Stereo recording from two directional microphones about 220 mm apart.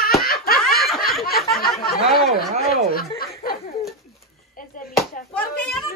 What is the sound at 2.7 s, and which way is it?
Snicker, 45° left (ahead or behind).